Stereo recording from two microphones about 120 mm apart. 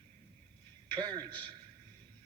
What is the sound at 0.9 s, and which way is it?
Speech, 40° right (ahead or behind).